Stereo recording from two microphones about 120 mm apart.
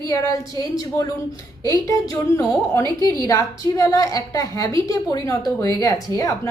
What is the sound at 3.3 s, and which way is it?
A woman's voice, 25° left (ahead or behind).